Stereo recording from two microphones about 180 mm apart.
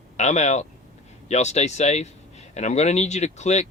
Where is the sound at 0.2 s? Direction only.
40° left (ahead or behind).